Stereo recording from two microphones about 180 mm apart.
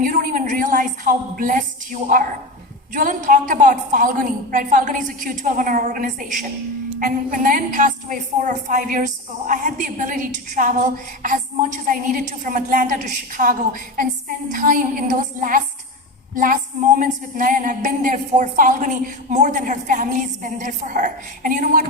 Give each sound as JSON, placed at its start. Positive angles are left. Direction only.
{"t": 0.0, "sound": "a woman's voice", "side_deg": -50}